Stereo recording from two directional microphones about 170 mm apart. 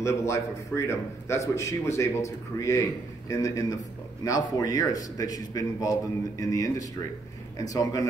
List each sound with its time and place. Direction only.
0.3 s a man's voice: 15° left (ahead or behind)